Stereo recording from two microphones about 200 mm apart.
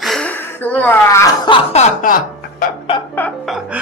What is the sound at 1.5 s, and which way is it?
Music, 35° left (ahead or behind).